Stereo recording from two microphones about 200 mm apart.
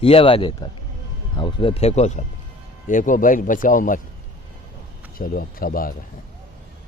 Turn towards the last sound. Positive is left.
turn(degrees=45)  # may be behind; listen again after turning